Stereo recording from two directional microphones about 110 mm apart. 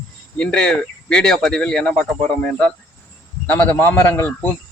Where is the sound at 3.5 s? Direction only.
15° left (ahead or behind).